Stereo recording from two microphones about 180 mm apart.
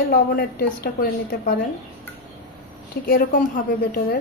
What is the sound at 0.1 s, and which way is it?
A woman's voice, 60° left (ahead or behind).